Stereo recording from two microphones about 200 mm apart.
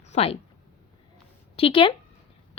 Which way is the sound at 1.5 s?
25° left (ahead or behind).